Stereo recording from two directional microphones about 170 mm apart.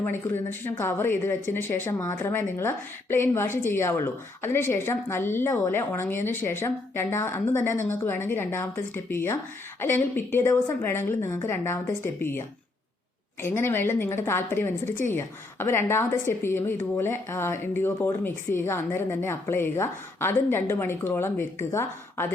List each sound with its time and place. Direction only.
0.6 s speech: 15° left (ahead or behind)